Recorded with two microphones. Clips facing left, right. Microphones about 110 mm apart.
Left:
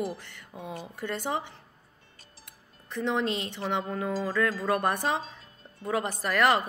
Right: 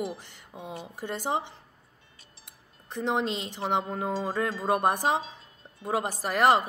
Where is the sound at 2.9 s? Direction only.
30° right (ahead or behind).